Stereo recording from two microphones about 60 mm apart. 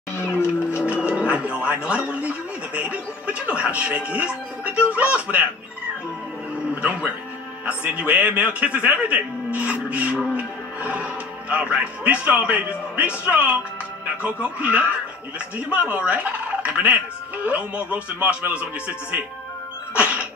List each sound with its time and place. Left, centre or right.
0.4 s music: left
0.8 s speech: right
6.7 s a man's voice: right
20.0 s sneeze: right